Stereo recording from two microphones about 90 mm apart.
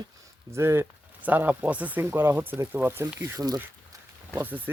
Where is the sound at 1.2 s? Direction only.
20° right (ahead or behind).